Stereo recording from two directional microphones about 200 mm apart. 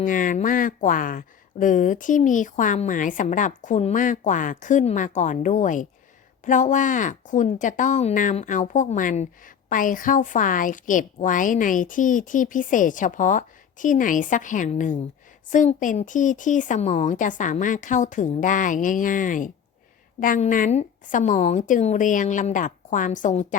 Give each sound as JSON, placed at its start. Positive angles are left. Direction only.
{"t": 0.0, "sound": "speech", "side_deg": 40}